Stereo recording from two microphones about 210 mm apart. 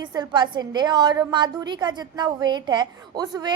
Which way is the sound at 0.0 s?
20° right (ahead or behind).